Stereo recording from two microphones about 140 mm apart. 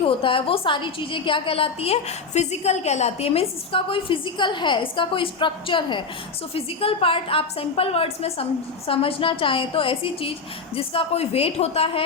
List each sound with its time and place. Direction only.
0.0 s a woman's voice: 40° left (ahead or behind)